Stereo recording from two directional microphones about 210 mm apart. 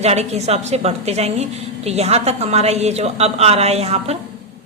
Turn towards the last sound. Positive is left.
turn(degrees=-30)  # may be behind; listen again after turning